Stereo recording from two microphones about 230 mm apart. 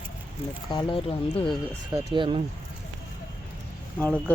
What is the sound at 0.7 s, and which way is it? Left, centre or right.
Speech, left.